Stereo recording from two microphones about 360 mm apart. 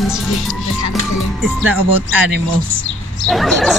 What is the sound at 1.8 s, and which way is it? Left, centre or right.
Speech, right.